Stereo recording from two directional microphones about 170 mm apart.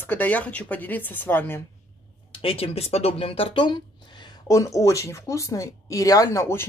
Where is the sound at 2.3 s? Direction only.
35° left (ahead or behind).